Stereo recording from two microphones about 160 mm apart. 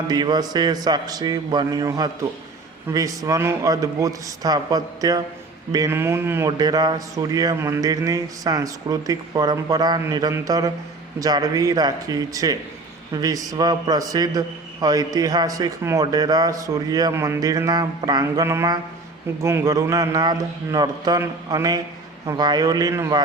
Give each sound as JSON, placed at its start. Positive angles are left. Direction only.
{"t": 0.1, "sound": "a man's voice", "side_deg": -25}